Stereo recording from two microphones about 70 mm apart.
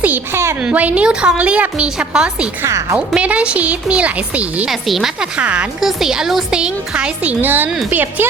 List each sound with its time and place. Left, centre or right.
0.6 s speech: right
2.6 s speech: right
3.2 s speech: centre
4.7 s speech: centre
5.4 s speech: centre
5.8 s speech: centre
7.4 s speech: right